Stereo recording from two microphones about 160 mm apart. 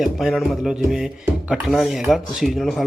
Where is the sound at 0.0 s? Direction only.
Centre (ahead or behind).